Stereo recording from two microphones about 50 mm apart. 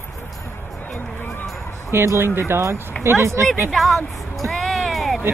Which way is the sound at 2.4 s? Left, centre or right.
Right.